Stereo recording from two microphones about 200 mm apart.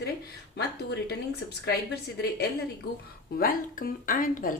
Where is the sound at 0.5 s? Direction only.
55° left (ahead or behind).